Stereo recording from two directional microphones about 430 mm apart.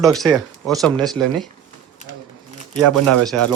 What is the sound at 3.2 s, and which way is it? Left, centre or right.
Speech, centre.